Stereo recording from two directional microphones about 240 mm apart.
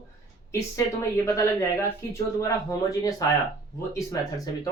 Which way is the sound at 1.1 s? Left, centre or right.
Centre.